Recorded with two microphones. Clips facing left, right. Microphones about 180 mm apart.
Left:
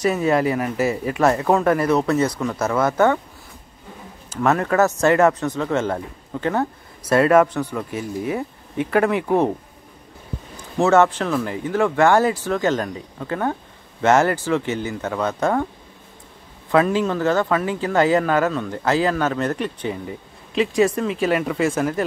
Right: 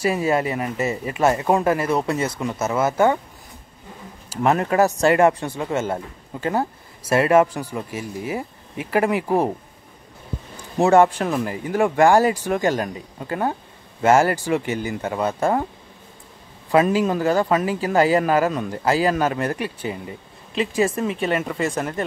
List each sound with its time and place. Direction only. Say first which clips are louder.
0.0 s speech: left 2 dB; 10° right (ahead or behind)
4.3 s speech: even; 20° right (ahead or behind)
7.1 s speech: left 1 dB; 10° right (ahead or behind)
10.8 s speech: right 1 dB; 15° right (ahead or behind)
16.7 s speech: even; 15° right (ahead or behind)